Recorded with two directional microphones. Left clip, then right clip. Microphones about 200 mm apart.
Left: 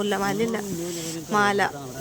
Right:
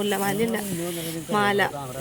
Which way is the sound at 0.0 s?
Centre (ahead or behind).